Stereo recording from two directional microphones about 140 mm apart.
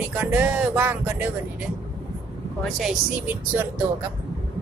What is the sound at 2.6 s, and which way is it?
Speech, 5° right (ahead or behind).